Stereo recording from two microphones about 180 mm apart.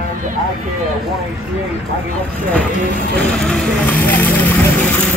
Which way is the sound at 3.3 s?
5° left (ahead or behind).